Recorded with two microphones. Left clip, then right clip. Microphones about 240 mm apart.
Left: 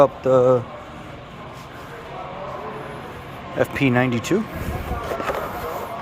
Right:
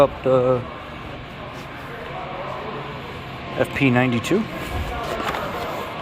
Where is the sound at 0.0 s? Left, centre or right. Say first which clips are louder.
Left 2 dB; centre.